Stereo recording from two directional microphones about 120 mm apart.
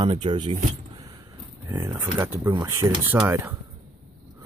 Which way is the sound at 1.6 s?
20° right (ahead or behind).